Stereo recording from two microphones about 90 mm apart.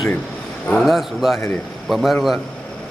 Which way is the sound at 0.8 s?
Centre (ahead or behind).